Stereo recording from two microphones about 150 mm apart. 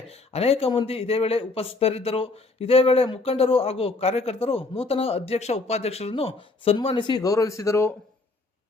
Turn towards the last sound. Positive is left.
turn(degrees=15)  # may be behind; listen again after turning